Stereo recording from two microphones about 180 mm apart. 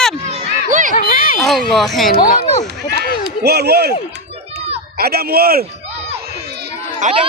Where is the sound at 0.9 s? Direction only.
50° left (ahead or behind).